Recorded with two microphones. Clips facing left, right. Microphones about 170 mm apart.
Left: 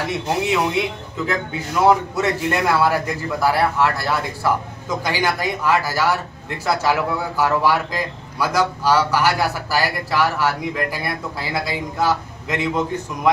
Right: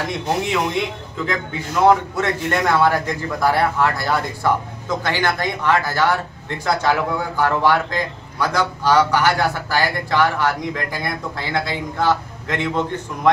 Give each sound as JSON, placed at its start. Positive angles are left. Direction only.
{"t": 0.0, "sound": "a man's voice", "side_deg": 5}